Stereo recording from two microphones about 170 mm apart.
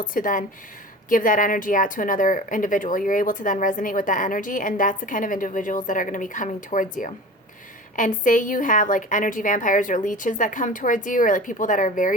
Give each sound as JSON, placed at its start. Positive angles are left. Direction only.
{"t": 0.0, "sound": "speech", "side_deg": 50}